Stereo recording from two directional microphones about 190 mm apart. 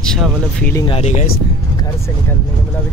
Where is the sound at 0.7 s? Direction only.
30° left (ahead or behind).